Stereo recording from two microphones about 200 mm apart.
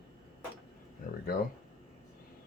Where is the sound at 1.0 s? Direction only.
45° left (ahead or behind).